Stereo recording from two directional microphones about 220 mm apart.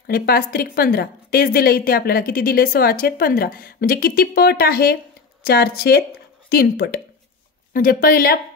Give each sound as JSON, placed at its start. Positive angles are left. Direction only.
{"t": 0.0, "sound": "a woman's voice", "side_deg": 45}